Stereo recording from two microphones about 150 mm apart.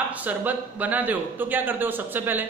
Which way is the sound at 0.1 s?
10° right (ahead or behind).